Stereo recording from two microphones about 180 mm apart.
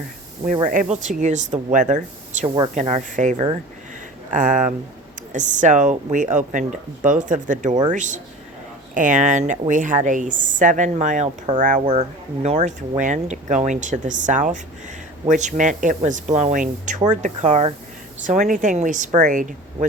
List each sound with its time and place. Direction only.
0.7 s speech: 45° right (ahead or behind)
5.3 s speech: 45° right (ahead or behind)